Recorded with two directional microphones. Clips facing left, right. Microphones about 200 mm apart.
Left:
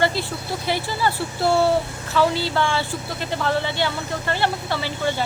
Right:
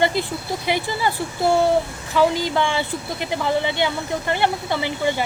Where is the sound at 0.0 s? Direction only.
15° right (ahead or behind).